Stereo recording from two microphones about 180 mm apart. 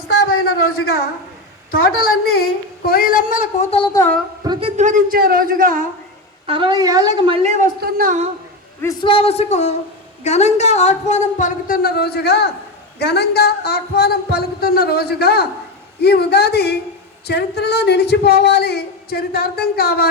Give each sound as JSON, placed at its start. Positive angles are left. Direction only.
{"t": 1.7, "sound": "speech", "side_deg": 55}
{"t": 3.9, "sound": "a woman's voice", "side_deg": 15}
{"t": 4.4, "sound": "a woman's voice", "side_deg": -20}
{"t": 4.8, "sound": "a man's voice", "side_deg": -45}
{"t": 6.4, "sound": "a woman's voice", "side_deg": -30}
{"t": 7.4, "sound": "a man's voice", "side_deg": -40}
{"t": 7.8, "sound": "a man's voice", "side_deg": -50}
{"t": 8.8, "sound": "a man's voice", "side_deg": 20}
{"t": 9.0, "sound": "a woman's voice", "side_deg": 30}